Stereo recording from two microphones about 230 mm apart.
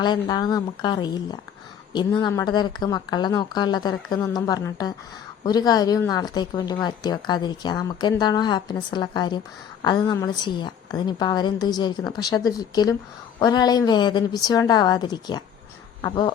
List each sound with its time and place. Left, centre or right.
0.0 s a woman's voice: centre